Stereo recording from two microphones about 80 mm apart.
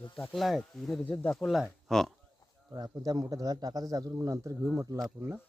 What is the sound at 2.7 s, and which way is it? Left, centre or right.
Speech, right.